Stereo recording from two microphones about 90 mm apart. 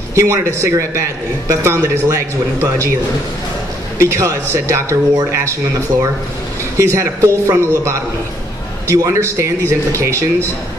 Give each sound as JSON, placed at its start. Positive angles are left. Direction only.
{"t": 0.1, "sound": "a man's voice", "side_deg": -35}
{"t": 4.0, "sound": "a man's voice", "side_deg": -35}
{"t": 6.8, "sound": "a man's voice", "side_deg": -35}